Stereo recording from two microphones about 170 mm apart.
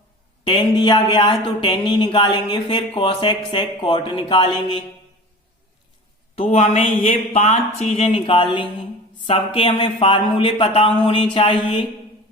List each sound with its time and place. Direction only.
0.4 s speech: 25° left (ahead or behind)
6.3 s speech: 35° left (ahead or behind)